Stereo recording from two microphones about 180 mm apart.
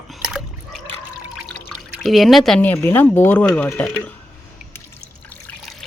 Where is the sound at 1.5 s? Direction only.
5° left (ahead or behind).